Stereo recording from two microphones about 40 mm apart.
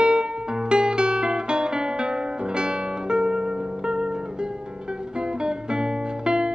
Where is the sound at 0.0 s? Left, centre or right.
Right.